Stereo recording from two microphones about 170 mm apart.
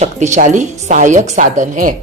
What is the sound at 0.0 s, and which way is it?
A woman's voice, 45° right (ahead or behind).